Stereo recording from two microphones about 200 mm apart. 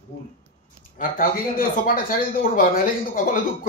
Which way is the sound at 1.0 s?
40° left (ahead or behind).